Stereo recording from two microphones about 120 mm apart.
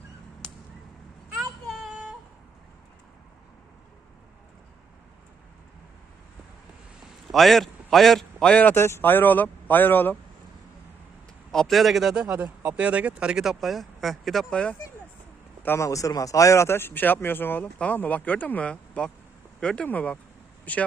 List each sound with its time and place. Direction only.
1.6 s a sound: 5° right (ahead or behind)
7.3 s a man's voice: centre (ahead or behind)
11.5 s speech: 5° left (ahead or behind)
12.3 s speech: 15° right (ahead or behind); by 14.8 s 10° left (ahead or behind)
15.6 s speech: 20° left (ahead or behind)